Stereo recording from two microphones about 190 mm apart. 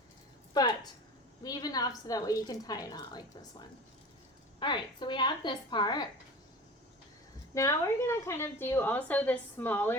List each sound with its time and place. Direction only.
0.5 s a woman's voice: 20° left (ahead or behind)
7.5 s a woman's voice: 15° left (ahead or behind)